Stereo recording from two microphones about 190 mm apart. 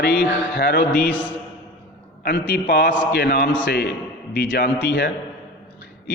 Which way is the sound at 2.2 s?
60° left (ahead or behind).